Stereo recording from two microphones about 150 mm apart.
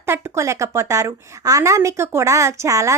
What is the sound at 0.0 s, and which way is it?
A woman's voice, 20° right (ahead or behind).